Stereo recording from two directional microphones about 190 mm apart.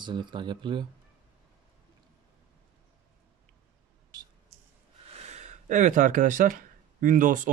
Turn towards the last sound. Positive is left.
turn(degrees=-45)  # may be behind; listen again after turning